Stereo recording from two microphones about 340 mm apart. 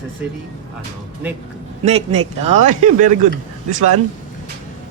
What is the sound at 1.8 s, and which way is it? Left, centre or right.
Speech, centre.